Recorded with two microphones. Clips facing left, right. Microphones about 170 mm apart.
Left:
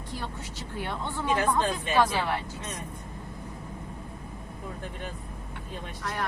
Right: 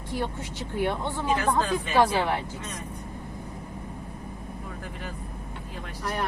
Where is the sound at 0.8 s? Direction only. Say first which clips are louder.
Right 5 dB; 15° right (ahead or behind).